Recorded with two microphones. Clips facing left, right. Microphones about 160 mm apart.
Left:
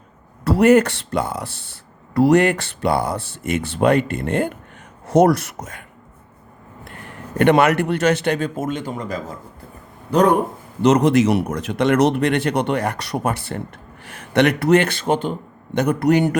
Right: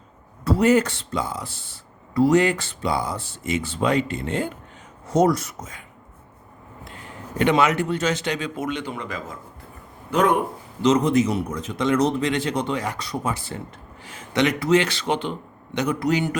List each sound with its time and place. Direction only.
0.4 s speech: 70° left (ahead or behind)
5.0 s speech: 70° left (ahead or behind)
6.8 s a man's voice: 60° left (ahead or behind); by 10.3 s 35° left (ahead or behind)
10.8 s speech: 70° left (ahead or behind)